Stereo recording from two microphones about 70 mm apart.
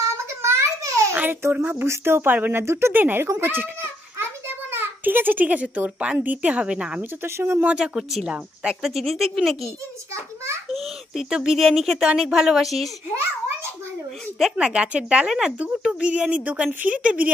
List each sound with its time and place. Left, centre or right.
0.4 s babbling: right
1.1 s speech: right
2.6 s speech: right
4.2 s a sound: right; by 6.1 s centre
6.1 s speech: right
7.0 s speech: right
7.6 s a woman's voice: centre
10.1 s a sound: right
10.7 s a woman's voice: centre
14.4 s a woman's voice: centre